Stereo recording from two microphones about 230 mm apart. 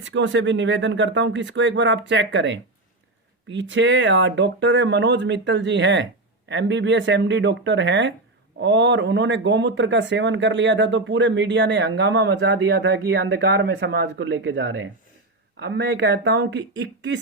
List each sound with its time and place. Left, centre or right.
0.0 s speech: right